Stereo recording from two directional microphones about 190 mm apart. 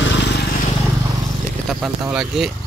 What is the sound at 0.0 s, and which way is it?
Vehicle, 70° left (ahead or behind).